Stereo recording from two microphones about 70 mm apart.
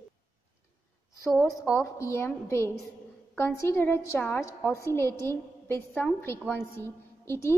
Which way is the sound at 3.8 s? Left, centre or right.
Left.